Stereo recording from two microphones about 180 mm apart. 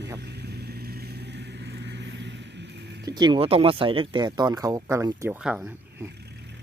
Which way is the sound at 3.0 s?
25° right (ahead or behind).